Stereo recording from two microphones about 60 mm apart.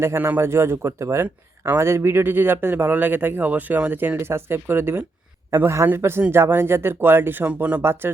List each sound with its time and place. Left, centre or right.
0.2 s speech: right
7.4 s speech: right
7.8 s speech: right